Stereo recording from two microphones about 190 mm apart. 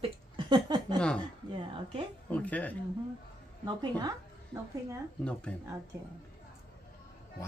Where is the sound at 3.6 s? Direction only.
20° right (ahead or behind).